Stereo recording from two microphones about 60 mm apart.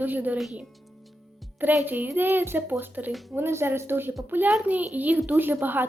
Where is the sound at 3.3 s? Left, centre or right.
Right.